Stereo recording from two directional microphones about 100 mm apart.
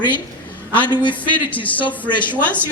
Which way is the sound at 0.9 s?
45° left (ahead or behind).